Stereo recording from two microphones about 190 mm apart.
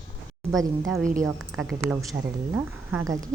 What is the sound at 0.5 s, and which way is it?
Speech, centre (ahead or behind).